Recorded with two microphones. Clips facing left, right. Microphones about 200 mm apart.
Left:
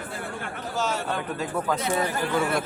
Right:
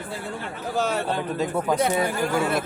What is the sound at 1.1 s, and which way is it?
Speech, 20° right (ahead or behind).